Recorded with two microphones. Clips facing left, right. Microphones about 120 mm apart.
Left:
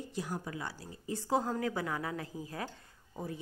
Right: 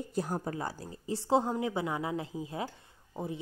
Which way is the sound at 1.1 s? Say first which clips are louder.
Right 4 dB; 25° right (ahead or behind).